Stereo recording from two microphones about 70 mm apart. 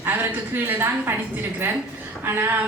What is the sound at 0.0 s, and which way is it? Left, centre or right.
A woman's voice, right.